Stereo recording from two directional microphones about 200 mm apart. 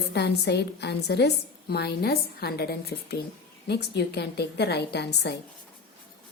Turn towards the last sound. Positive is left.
turn(degrees=55)  # may be behind; listen again after turning